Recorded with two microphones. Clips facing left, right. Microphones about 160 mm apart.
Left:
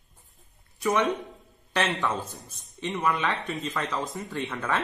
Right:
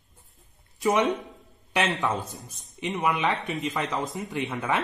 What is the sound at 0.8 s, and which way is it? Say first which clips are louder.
Speech: right 2 dB; 20° right (ahead or behind).